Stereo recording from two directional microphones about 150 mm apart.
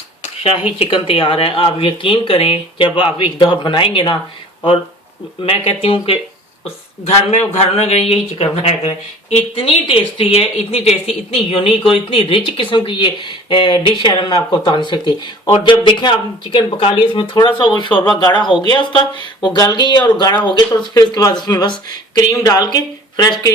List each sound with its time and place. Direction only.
0.2 s a sound: 40° left (ahead or behind)
0.8 s speech: 35° left (ahead or behind)
5.5 s speech: 40° left (ahead or behind)